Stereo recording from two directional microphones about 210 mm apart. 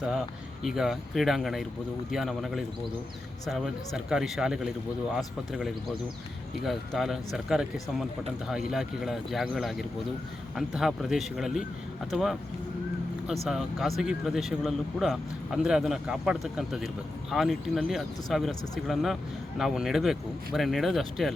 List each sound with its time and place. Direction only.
0.6 s speech: centre (ahead or behind)